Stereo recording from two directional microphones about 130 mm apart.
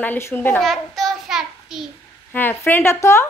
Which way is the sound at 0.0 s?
15° left (ahead or behind).